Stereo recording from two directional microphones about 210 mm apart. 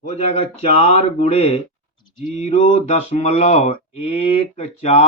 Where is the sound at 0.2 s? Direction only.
30° left (ahead or behind).